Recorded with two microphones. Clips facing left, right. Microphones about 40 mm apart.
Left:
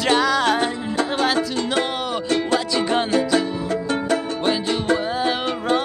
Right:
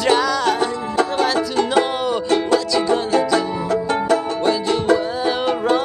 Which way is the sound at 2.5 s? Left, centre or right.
Left.